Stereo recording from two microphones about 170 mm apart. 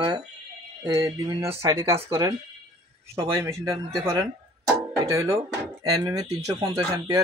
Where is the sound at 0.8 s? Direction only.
20° right (ahead or behind).